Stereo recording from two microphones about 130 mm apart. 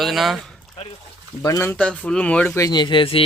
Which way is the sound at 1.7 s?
10° left (ahead or behind).